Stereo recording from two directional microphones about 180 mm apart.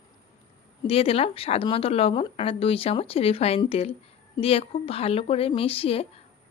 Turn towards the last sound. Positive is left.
turn(degrees=30)  # may be behind; listen again after turning